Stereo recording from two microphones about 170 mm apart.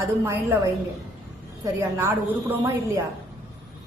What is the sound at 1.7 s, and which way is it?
A woman's voice, 10° right (ahead or behind).